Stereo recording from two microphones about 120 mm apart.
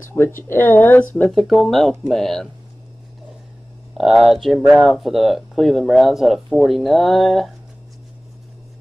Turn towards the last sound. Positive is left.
turn(degrees=0)  # may be behind; listen again after turning